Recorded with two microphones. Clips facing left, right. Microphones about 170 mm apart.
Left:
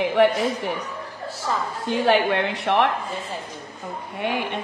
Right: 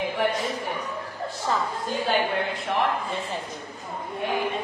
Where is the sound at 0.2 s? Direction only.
75° left (ahead or behind).